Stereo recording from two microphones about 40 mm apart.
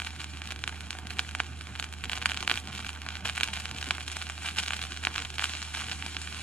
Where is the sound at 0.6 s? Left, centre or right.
Left.